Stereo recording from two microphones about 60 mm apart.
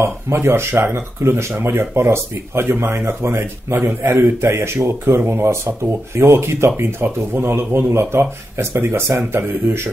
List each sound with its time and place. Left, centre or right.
0.0 s speech: right